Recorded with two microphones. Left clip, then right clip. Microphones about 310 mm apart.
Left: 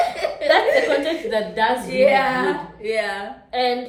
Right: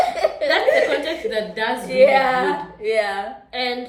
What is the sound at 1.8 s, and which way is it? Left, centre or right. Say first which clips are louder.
Speech: right 5 dB; centre.